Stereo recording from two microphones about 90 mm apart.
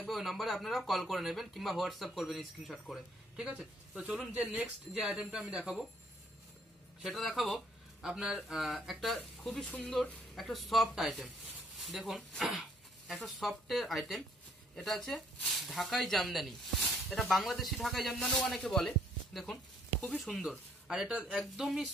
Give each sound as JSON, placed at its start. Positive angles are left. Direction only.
{"t": 0.1, "sound": "speech", "side_deg": 0}
{"t": 3.4, "sound": "speech", "side_deg": -10}
{"t": 7.0, "sound": "a man's voice", "side_deg": 0}
{"t": 9.7, "sound": "speech", "side_deg": 15}
{"t": 10.5, "sound": "speech", "side_deg": 0}
{"t": 21.1, "sound": "speech", "side_deg": -15}